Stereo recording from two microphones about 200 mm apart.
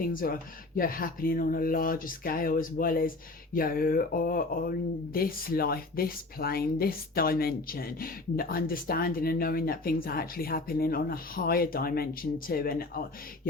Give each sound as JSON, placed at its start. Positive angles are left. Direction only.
{"t": 0.1, "sound": "speech", "side_deg": 45}